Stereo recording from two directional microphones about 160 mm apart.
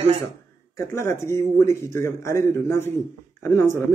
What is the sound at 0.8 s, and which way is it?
Speech, 15° left (ahead or behind).